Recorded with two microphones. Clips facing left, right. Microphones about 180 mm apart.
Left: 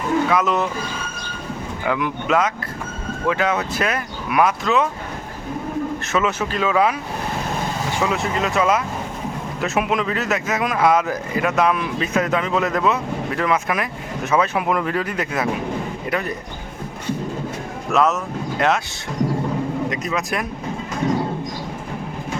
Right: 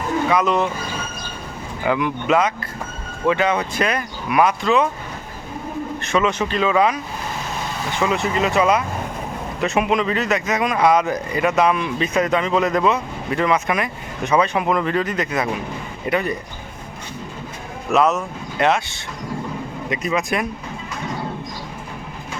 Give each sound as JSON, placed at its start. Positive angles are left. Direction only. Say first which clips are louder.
{"t": 0.3, "sound": "speech", "louder": "right 1 dB", "side_deg": 5}
{"t": 1.8, "sound": "speech", "louder": "right 3 dB", "side_deg": 0}
{"t": 6.0, "sound": "speech", "louder": "right 5 dB", "side_deg": 5}
{"t": 8.0, "sound": "speech", "louder": "right 3 dB", "side_deg": 0}
{"t": 17.9, "sound": "speech", "louder": "right 1 dB", "side_deg": 0}
{"t": 19.9, "sound": "speech", "louder": "right 2 dB", "side_deg": -5}